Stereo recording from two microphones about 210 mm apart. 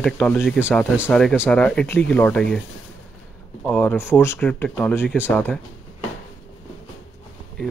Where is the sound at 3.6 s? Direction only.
5° left (ahead or behind).